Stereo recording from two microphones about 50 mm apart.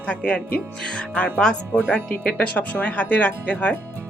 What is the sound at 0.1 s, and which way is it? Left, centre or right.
Speech, left.